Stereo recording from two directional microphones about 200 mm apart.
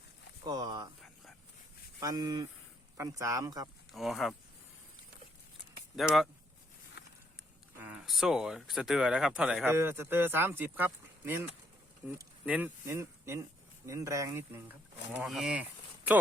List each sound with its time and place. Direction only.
0.4 s a sound: 20° right (ahead or behind)
2.0 s speech: 20° right (ahead or behind)
3.9 s speech: centre (ahead or behind)
6.0 s speech: centre (ahead or behind)
7.8 s speech: 5° right (ahead or behind)
15.2 s speech: centre (ahead or behind)